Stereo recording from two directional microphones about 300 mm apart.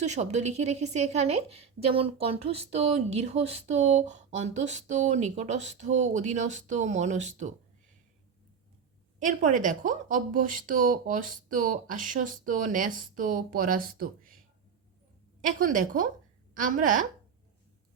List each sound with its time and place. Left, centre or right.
0.0 s a woman's voice: right
9.2 s a woman's voice: right
15.4 s a woman's voice: right